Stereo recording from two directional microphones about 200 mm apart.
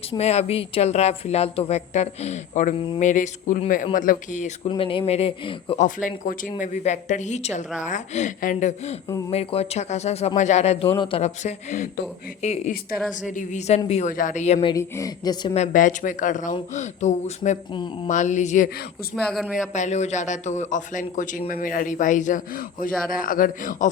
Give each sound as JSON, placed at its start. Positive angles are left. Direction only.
{"t": 0.2, "sound": "a man's voice", "side_deg": 30}
{"t": 2.7, "sound": "a woman's voice", "side_deg": 25}
{"t": 3.0, "sound": "a man's voice", "side_deg": 40}
{"t": 4.7, "sound": "a man's voice", "side_deg": 25}
{"t": 14.7, "sound": "a woman's voice", "side_deg": 15}
{"t": 15.5, "sound": "a man's voice", "side_deg": 40}
{"t": 17.7, "sound": "a woman's voice", "side_deg": 25}
{"t": 18.1, "sound": "a man's voice", "side_deg": 35}
{"t": 19.1, "sound": "speech", "side_deg": 0}
{"t": 19.7, "sound": "a man's voice", "side_deg": 35}